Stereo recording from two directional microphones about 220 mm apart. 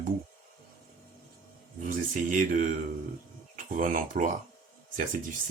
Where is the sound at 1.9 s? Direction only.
35° right (ahead or behind).